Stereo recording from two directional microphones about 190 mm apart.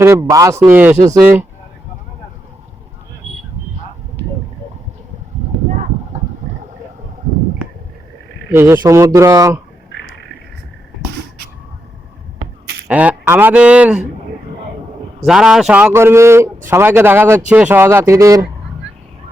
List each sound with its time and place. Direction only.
0.0 s speech: 15° right (ahead or behind)
8.4 s speech: 10° right (ahead or behind)
12.9 s speech: 10° right (ahead or behind)
15.2 s speech: 5° right (ahead or behind)